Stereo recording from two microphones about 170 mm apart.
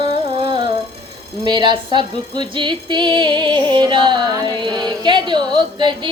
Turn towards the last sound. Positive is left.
turn(degrees=-25)  # may be behind; listen again after turning